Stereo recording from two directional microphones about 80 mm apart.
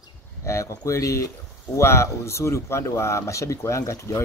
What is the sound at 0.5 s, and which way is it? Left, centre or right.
Speech, left.